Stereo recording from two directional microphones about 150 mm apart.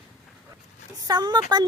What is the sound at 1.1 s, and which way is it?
Speech, 30° right (ahead or behind).